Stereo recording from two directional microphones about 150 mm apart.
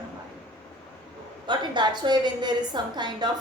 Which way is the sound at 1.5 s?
30° right (ahead or behind).